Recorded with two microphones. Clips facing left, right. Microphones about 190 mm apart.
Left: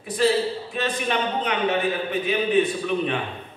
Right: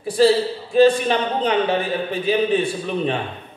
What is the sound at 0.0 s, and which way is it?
A man's voice, 30° right (ahead or behind).